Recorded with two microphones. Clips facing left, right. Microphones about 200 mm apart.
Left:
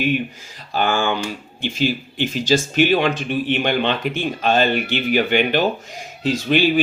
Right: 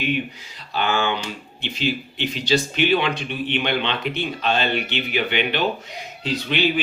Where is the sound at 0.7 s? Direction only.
45° left (ahead or behind).